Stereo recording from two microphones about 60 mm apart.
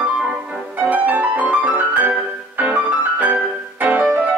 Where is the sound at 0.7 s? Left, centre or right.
Right.